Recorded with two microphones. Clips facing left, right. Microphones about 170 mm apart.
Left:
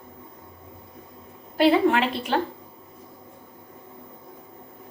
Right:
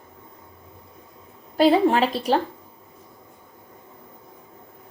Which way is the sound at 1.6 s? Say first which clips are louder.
Right 2 dB; 35° right (ahead or behind).